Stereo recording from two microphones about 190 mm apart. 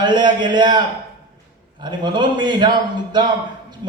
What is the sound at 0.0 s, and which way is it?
A man's voice, 25° right (ahead or behind).